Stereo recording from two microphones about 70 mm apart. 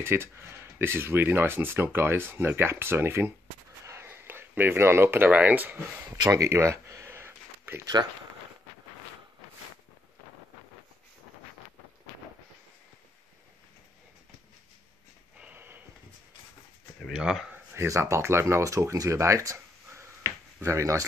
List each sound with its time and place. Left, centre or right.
0.0 s speech: right
6.0 s speech: right
6.3 s a sound: right
7.8 s speech: right
15.3 s a sound: centre
17.1 s speech: centre
17.7 s speech: right